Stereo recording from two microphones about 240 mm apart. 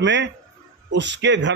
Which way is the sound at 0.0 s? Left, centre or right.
Right.